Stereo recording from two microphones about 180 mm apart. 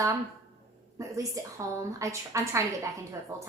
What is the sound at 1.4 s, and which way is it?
A woman's voice, 20° right (ahead or behind).